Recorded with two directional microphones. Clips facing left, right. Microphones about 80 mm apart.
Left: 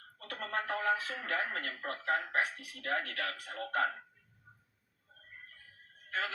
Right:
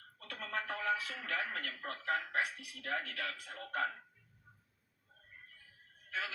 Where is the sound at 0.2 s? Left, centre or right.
Left.